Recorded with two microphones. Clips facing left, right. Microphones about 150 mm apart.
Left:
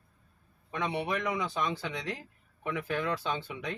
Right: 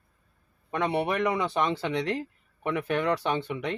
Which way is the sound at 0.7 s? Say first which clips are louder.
Right 5 dB; 60° right (ahead or behind).